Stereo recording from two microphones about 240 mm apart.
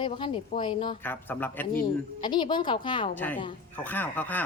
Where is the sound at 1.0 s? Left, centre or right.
Centre.